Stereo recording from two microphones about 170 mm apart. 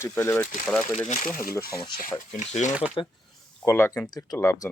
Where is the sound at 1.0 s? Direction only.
45° left (ahead or behind).